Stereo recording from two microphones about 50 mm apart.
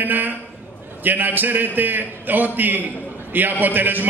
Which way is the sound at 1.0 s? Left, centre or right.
Right.